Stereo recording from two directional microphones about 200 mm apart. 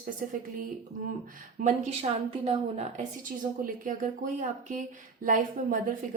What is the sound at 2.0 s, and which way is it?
Speech, 30° right (ahead or behind).